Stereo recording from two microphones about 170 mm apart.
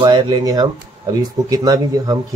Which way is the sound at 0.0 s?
25° right (ahead or behind).